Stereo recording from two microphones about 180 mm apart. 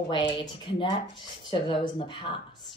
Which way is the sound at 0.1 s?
25° left (ahead or behind).